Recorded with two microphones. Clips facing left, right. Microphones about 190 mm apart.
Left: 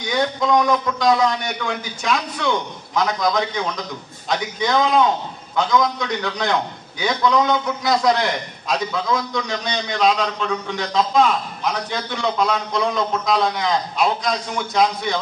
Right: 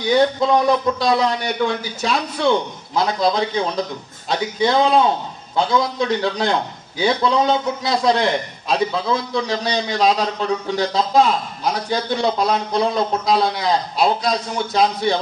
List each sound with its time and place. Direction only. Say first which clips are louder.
0.0 s a man's voice: right 5 dB; 30° right (ahead or behind)